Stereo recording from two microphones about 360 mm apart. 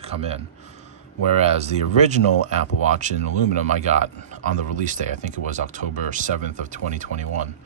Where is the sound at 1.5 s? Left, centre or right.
Centre.